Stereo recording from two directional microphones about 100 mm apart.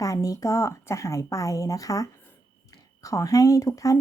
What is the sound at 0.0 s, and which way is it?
A woman's voice, 35° left (ahead or behind).